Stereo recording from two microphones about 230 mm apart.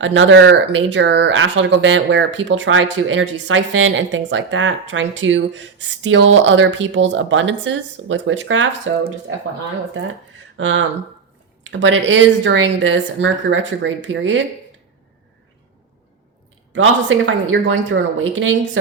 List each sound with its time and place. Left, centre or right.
0.0 s speech: right
17.4 s speech: right